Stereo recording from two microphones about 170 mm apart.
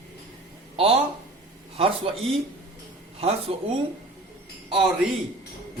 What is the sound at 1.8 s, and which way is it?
Speech, 35° right (ahead or behind).